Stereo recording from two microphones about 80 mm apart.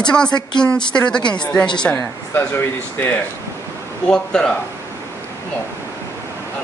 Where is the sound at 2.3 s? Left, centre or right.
Left.